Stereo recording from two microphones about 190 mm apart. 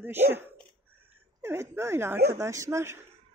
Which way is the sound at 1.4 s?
15° right (ahead or behind).